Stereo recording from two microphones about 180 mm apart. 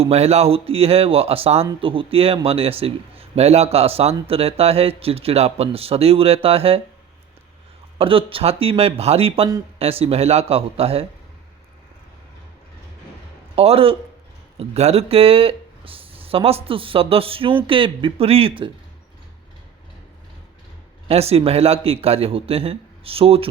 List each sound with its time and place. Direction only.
0.0 s speech: 35° right (ahead or behind)
7.9 s speech: 30° right (ahead or behind)
13.6 s speech: 30° right (ahead or behind)
21.1 s speech: 35° right (ahead or behind)